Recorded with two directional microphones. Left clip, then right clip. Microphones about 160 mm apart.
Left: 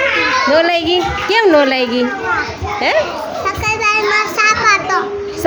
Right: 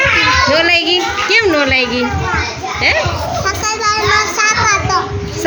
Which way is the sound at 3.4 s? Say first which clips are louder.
Left 1 dB; 30° left (ahead or behind).